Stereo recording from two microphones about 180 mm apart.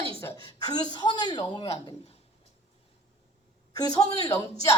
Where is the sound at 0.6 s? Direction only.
20° left (ahead or behind).